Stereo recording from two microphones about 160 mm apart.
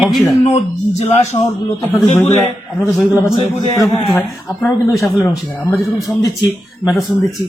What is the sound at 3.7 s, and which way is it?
A man's voice, 20° left (ahead or behind).